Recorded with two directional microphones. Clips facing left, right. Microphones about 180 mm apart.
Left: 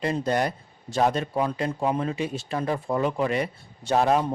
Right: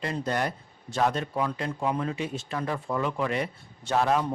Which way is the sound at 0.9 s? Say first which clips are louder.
Left 3 dB; 35° left (ahead or behind).